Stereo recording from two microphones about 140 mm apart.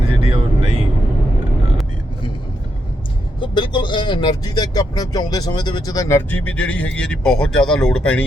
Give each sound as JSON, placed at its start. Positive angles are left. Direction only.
{"t": 0.3, "sound": "vehicle", "side_deg": -40}
{"t": 3.4, "sound": "speech", "side_deg": 35}